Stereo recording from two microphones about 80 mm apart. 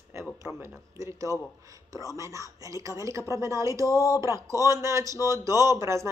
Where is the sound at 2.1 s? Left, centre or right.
Right.